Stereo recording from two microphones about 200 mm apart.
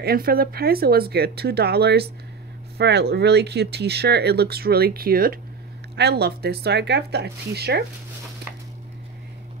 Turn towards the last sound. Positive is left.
turn(degrees=-55)  # may be behind; listen again after turning